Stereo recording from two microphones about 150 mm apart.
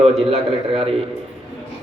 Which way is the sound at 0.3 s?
40° right (ahead or behind).